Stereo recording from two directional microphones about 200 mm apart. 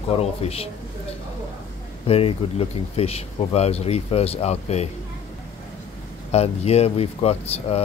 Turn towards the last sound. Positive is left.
turn(degrees=30)  # may be behind; listen again after turning